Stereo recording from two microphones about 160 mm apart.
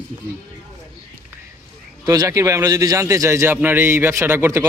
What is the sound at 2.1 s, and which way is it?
A man's voice, 20° right (ahead or behind).